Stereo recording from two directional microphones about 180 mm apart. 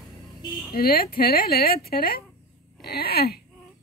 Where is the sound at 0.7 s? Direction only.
55° left (ahead or behind).